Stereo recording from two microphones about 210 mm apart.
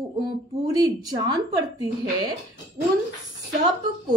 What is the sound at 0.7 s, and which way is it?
Speech, 20° right (ahead or behind).